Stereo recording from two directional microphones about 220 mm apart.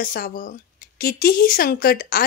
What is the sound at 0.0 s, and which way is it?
Speech, 40° left (ahead or behind).